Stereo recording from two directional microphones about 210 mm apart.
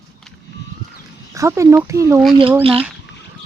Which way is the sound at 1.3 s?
15° right (ahead or behind).